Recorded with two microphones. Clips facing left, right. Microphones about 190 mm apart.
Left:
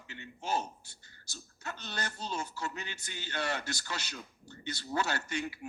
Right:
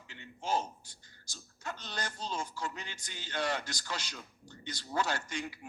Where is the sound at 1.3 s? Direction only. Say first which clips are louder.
Right 1 dB; 60° left (ahead or behind).